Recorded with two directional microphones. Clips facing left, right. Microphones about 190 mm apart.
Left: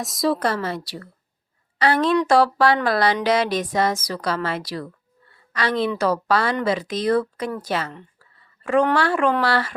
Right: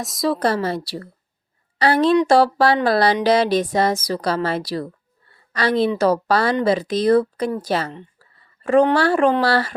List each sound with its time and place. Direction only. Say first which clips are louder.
0.0 s a woman's voice: even; centre (ahead or behind)
0.3 s a woman's voice: right 4 dB; 35° right (ahead or behind)
5.3 s a sound: right 4 dB; 35° right (ahead or behind)
6.0 s a woman's voice: right 3 dB; 35° right (ahead or behind)
8.2 s a sound: right 4 dB; 35° right (ahead or behind)
9.4 s a woman's voice: right 3 dB; 35° right (ahead or behind)